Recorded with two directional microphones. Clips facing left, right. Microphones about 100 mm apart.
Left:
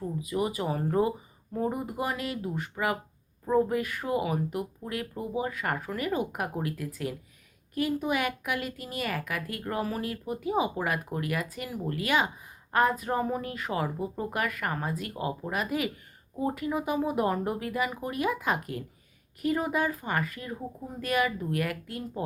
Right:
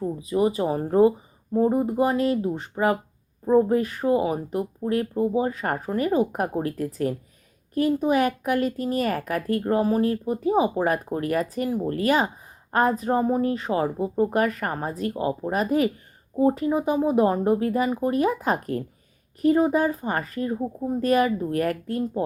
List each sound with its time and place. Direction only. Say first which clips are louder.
0.0 s speech: right 7 dB; 30° right (ahead or behind)